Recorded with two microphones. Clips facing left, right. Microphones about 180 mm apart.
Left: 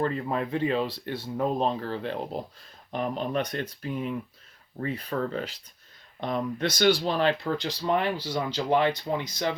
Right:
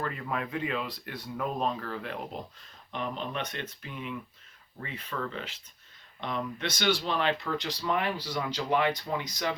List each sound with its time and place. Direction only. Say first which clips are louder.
0.0 s speech: left 6 dB; 30° left (ahead or behind)